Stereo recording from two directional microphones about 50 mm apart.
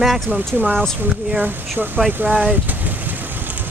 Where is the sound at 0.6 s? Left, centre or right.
Right.